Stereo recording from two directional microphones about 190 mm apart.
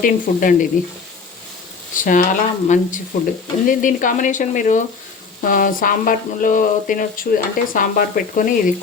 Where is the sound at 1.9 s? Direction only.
45° left (ahead or behind).